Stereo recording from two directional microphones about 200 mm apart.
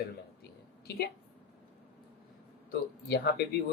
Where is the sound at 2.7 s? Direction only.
55° left (ahead or behind).